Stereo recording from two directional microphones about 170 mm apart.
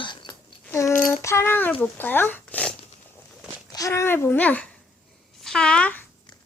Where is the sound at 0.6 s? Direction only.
15° left (ahead or behind).